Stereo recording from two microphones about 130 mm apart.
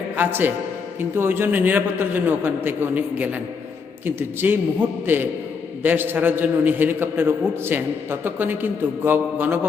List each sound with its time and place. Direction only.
0.2 s a man's voice: 15° right (ahead or behind)